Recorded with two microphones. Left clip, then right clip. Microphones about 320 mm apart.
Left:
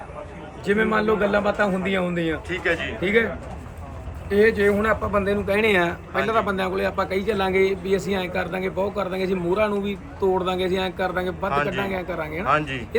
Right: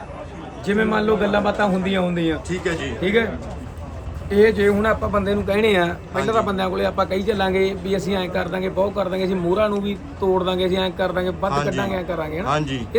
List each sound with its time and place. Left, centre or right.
0.6 s a man's voice: centre
4.3 s a man's voice: centre